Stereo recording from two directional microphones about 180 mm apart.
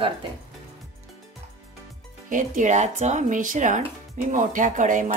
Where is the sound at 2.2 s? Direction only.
45° right (ahead or behind).